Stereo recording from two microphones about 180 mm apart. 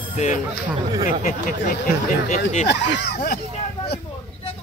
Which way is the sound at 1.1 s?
45° left (ahead or behind).